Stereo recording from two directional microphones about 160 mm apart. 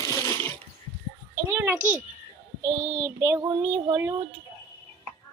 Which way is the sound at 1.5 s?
15° right (ahead or behind).